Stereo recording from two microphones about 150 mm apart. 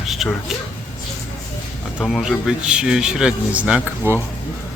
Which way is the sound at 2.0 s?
Centre (ahead or behind).